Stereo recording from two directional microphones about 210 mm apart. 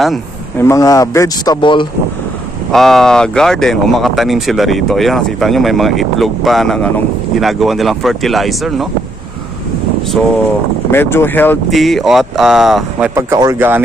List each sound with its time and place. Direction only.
0.6 s speech: 15° left (ahead or behind)
2.7 s speech: centre (ahead or behind)
10.9 s speech: 10° left (ahead or behind)
13.1 s speech: 15° right (ahead or behind)